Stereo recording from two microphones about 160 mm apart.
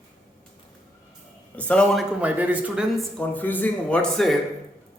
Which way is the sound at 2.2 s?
10° right (ahead or behind).